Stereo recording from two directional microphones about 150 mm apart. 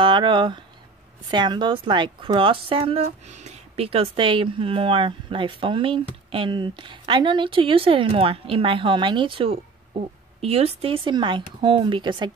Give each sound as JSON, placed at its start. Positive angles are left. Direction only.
{"t": 0.0, "sound": "a woman's voice", "side_deg": -30}